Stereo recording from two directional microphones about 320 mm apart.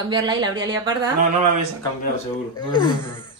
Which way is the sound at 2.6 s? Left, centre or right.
Centre.